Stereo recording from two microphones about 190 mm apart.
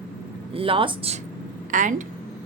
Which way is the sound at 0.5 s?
30° right (ahead or behind).